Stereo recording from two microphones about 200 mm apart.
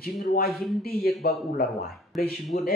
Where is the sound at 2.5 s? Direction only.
50° left (ahead or behind).